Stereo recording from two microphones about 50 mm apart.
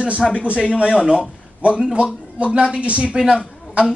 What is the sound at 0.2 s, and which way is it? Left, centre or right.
Speech, centre.